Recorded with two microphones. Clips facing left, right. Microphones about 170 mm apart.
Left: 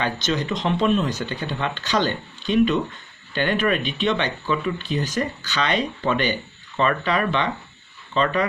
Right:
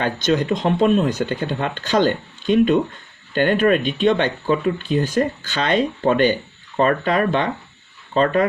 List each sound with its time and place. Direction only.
0.0 s speech: 55° right (ahead or behind)